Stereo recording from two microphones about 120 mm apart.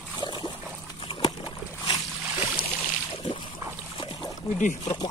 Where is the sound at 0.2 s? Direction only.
40° left (ahead or behind).